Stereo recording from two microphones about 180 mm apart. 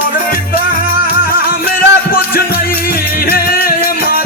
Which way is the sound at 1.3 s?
55° left (ahead or behind).